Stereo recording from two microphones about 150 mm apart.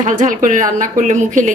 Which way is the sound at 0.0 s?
60° right (ahead or behind).